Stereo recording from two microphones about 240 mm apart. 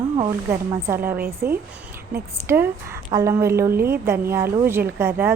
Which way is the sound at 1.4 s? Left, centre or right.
Right.